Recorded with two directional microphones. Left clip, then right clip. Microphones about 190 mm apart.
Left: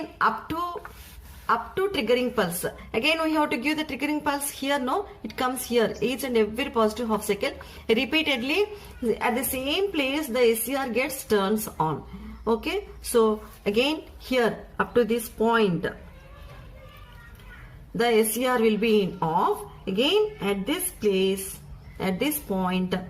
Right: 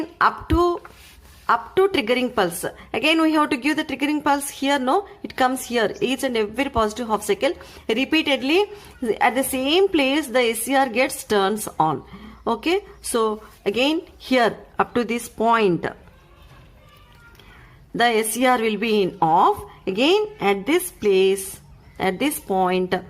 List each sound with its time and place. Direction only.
0.2 s a sound: 50° right (ahead or behind)
1.5 s a woman's voice: 50° right (ahead or behind)
17.9 s a woman's voice: 50° right (ahead or behind)